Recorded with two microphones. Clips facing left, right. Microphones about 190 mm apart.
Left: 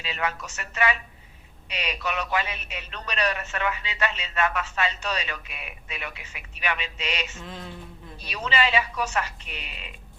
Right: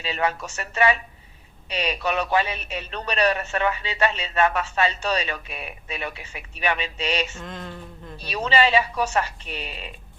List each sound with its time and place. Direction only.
0.0 s a man's voice: 30° right (ahead or behind)
7.4 s a sound: 5° left (ahead or behind)
8.2 s a man's voice: 30° right (ahead or behind)